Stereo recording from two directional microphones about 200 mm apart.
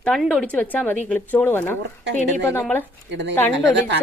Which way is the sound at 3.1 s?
60° right (ahead or behind).